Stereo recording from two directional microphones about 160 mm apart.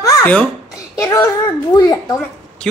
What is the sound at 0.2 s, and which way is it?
Speech, 10° left (ahead or behind).